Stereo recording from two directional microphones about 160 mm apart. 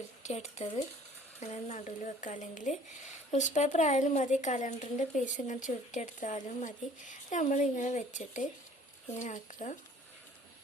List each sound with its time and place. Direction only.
0.2 s speech: 45° left (ahead or behind)